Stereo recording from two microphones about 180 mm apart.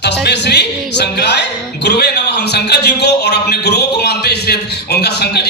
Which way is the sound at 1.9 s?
65° left (ahead or behind).